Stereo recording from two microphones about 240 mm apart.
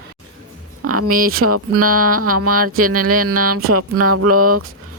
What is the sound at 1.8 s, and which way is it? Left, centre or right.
Speech, right.